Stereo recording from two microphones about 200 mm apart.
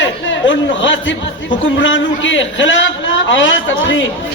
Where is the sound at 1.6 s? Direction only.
70° left (ahead or behind).